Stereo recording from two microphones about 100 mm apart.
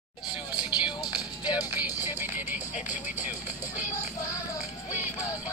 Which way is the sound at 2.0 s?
20° right (ahead or behind).